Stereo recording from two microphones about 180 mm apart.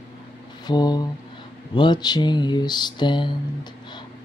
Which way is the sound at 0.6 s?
25° left (ahead or behind).